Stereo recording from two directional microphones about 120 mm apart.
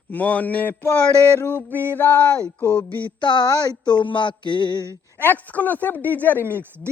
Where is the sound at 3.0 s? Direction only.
40° left (ahead or behind).